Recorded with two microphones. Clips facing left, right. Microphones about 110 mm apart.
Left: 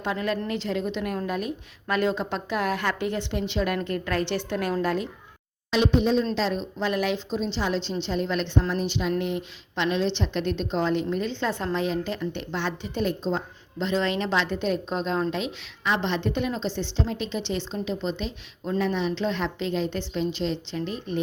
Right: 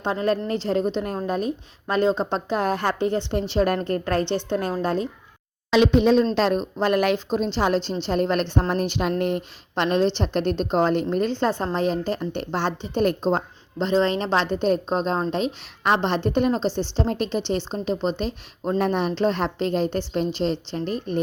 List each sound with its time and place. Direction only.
0.0 s a woman's voice: 35° right (ahead or behind)
5.7 s speech: 80° right
6.3 s a woman's voice: 55° right (ahead or behind); by 13.0 s 35° right (ahead or behind)
13.0 s a woman's voice: 50° right (ahead or behind); by 17.0 s 35° right (ahead or behind)
17.0 s a woman's voice: 50° right (ahead or behind)